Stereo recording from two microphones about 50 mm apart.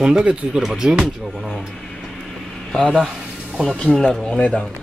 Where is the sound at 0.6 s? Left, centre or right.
Centre.